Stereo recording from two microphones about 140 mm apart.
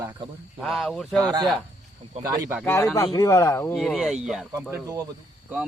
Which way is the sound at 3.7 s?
Centre (ahead or behind).